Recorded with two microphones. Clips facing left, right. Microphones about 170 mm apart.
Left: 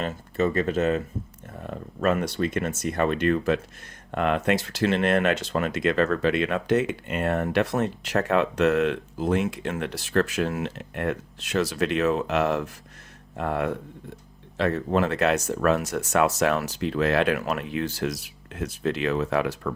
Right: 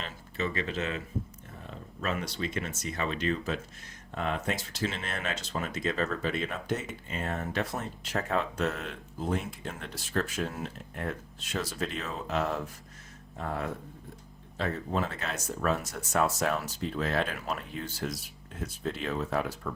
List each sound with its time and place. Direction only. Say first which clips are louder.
0.0 s speech: left 9 dB; 45° left (ahead or behind); by 19.7 s 80° left